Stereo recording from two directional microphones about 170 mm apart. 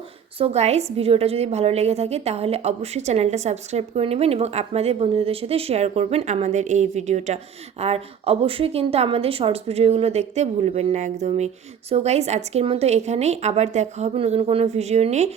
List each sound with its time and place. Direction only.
0.3 s a woman's voice: 35° right (ahead or behind)